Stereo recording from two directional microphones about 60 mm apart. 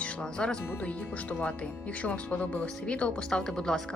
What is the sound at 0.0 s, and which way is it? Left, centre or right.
Speech, centre.